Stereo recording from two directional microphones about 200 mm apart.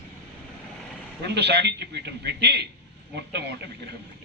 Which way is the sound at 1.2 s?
55° right (ahead or behind).